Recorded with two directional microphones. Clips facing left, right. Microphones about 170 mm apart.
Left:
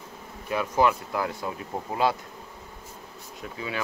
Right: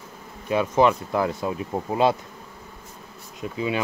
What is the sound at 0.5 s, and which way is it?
Speech, 20° right (ahead or behind).